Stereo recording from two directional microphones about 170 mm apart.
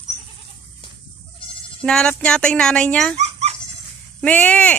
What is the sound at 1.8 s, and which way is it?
Speech, 5° left (ahead or behind).